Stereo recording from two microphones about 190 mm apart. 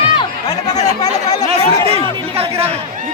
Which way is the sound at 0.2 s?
20° left (ahead or behind).